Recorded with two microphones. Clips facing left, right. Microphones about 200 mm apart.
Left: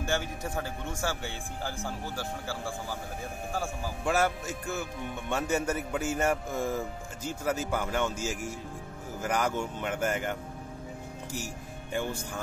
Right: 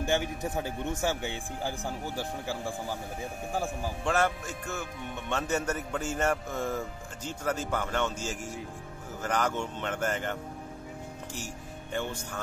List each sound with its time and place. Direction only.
0.0 s a man's voice: 20° right (ahead or behind)
3.6 s speech: 10° left (ahead or behind)
11.3 s speech: 10° left (ahead or behind)